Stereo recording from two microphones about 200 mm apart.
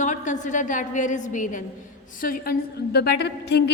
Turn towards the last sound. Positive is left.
turn(degrees=55)  # may be behind; listen again after turning